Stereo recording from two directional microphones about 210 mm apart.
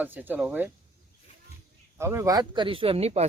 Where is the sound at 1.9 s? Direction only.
10° right (ahead or behind); by 3.2 s 30° right (ahead or behind).